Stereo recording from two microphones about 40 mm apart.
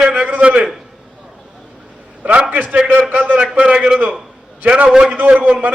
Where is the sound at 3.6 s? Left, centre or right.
Right.